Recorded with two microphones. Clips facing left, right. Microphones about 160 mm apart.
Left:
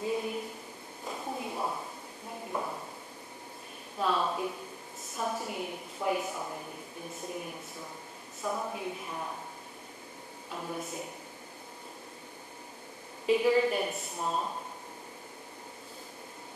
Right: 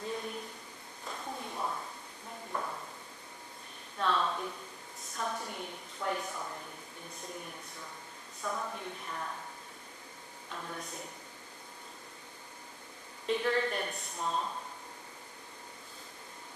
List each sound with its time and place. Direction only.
0.0 s a sound: 10° left (ahead or behind)
4.0 s a sound: 10° left (ahead or behind)
5.1 s a woman's voice: 5° left (ahead or behind)
8.4 s a woman's voice: 20° left (ahead or behind)
8.7 s a woman's voice: 10° left (ahead or behind)
10.5 s a woman's voice: 10° left (ahead or behind)
13.3 s a woman's voice: 10° left (ahead or behind)